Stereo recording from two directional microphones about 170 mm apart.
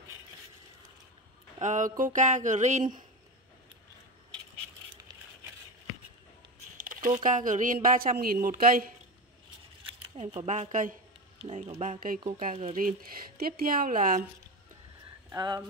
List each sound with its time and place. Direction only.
1.6 s a sound: 45° right (ahead or behind)
6.8 s a sound: 55° right (ahead or behind)
7.2 s speech: 50° right (ahead or behind)
10.1 s speech: 40° right (ahead or behind)
11.6 s speech: 40° right (ahead or behind)
13.4 s speech: 60° right (ahead or behind)
15.3 s speech: 20° right (ahead or behind)